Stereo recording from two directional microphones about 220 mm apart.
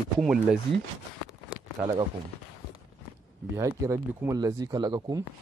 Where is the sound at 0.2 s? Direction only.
5° right (ahead or behind).